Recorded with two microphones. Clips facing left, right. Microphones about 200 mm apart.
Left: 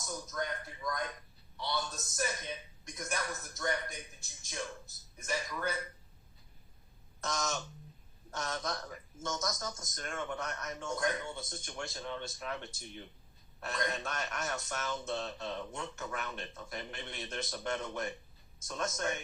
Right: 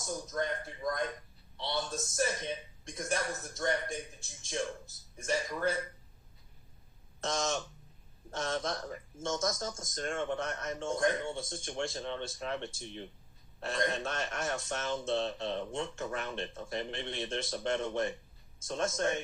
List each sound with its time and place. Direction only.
0.3 s speech: 30° right (ahead or behind)
5.1 s speech: 30° right (ahead or behind)
7.2 s speech: 30° right (ahead or behind)